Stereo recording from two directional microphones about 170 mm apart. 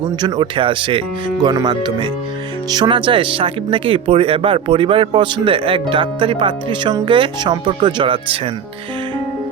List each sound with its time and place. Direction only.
0.2 s speech: 25° right (ahead or behind)